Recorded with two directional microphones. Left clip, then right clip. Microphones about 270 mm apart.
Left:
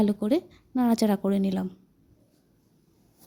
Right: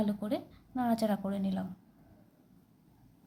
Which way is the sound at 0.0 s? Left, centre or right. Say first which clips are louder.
Left 9 dB; left.